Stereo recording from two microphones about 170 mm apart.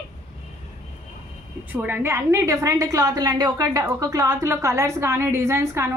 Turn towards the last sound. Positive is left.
turn(degrees=-15)  # may be behind; listen again after turning